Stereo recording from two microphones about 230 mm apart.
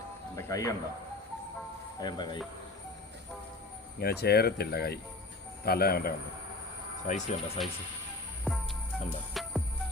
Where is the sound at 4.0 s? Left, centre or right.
Left.